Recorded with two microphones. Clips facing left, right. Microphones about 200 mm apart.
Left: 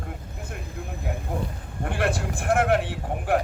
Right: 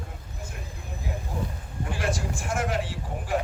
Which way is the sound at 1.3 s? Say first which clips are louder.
Left 3 dB; 55° left (ahead or behind).